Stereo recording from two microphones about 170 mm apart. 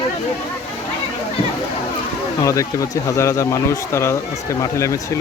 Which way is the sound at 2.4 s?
20° left (ahead or behind).